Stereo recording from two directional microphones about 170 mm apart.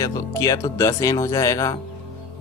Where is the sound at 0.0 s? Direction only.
20° left (ahead or behind).